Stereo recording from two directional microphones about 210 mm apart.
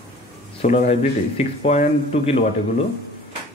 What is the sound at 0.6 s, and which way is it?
A man's voice, 35° left (ahead or behind).